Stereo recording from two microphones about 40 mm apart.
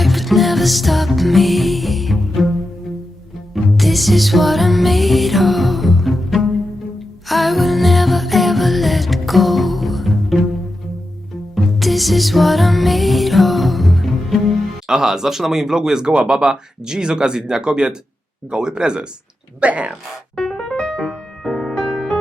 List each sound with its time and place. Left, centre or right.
0.0 s music: centre
11.5 s music: centre
14.8 s speech: centre
19.5 s speech: right
20.3 s music: centre
20.7 s music: left